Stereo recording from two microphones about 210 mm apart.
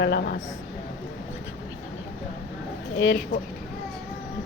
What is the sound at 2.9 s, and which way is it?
Speech, 65° left (ahead or behind).